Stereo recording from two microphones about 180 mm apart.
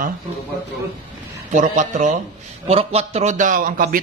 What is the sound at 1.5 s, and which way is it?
A man's voice, 45° right (ahead or behind).